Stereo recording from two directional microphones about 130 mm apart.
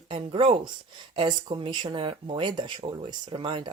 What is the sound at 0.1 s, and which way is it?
Speech, 45° right (ahead or behind).